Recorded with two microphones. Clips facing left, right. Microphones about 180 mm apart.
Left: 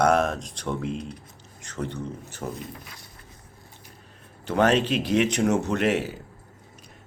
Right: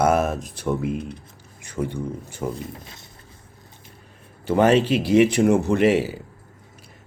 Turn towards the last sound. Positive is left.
turn(degrees=-5)  # may be behind; listen again after turning